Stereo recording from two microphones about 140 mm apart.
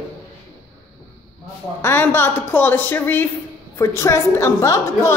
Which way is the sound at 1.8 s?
15° left (ahead or behind).